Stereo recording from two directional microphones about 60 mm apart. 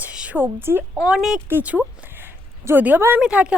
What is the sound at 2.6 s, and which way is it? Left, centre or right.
Speech, right.